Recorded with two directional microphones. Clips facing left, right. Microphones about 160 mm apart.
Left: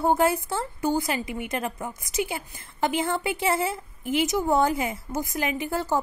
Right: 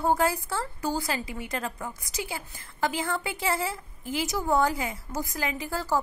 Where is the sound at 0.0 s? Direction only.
25° left (ahead or behind).